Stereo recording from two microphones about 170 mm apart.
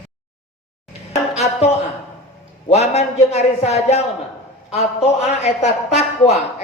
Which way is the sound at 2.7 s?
40° left (ahead or behind).